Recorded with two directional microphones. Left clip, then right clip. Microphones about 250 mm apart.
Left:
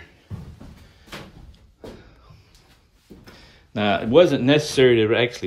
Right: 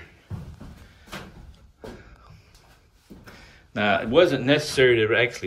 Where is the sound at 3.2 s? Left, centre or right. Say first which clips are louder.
Right 2 dB; centre.